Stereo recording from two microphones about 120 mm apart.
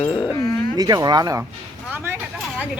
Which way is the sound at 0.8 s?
35° right (ahead or behind).